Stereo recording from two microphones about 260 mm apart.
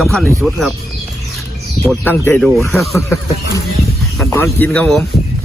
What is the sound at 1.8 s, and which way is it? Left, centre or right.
Speech, centre.